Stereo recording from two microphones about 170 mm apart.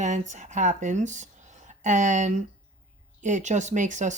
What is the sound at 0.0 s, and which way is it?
Speech, 45° right (ahead or behind).